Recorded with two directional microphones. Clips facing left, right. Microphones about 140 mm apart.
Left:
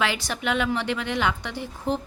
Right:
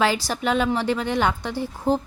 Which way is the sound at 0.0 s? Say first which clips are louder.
Right 5 dB; 35° right (ahead or behind).